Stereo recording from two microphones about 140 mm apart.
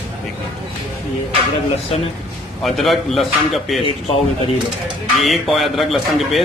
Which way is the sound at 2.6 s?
Centre (ahead or behind).